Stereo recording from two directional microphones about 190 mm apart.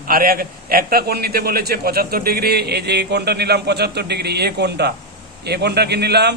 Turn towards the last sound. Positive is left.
turn(degrees=-60)  # may be behind; listen again after turning